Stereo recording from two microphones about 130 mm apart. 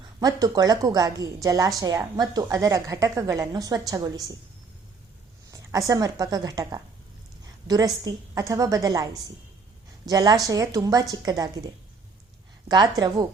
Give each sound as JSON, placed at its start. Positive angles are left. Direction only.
{"t": 0.2, "sound": "a woman's voice", "side_deg": -30}
{"t": 5.5, "sound": "a woman's voice", "side_deg": -25}
{"t": 10.1, "sound": "a woman's voice", "side_deg": -30}